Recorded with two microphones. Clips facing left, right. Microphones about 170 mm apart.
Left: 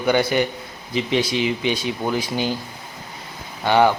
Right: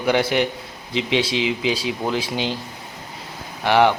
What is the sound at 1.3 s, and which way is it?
Speech, 90° right.